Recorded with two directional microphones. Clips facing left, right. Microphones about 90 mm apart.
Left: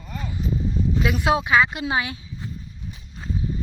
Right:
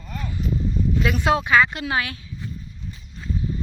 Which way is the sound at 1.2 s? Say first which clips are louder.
Right 1 dB; 15° left (ahead or behind).